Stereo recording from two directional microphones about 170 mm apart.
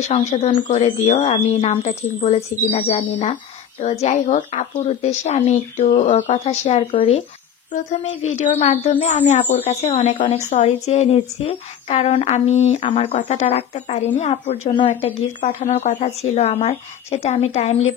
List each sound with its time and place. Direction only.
0.1 s a woman's voice: 40° left (ahead or behind)
15.6 s a woman's voice: 45° left (ahead or behind)